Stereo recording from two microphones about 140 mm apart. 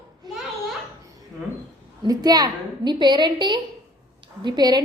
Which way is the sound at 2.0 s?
30° right (ahead or behind).